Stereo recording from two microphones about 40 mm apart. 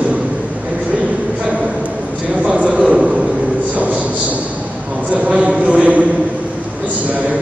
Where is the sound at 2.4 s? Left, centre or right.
Right.